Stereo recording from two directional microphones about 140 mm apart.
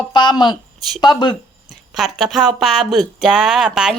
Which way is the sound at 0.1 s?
35° left (ahead or behind).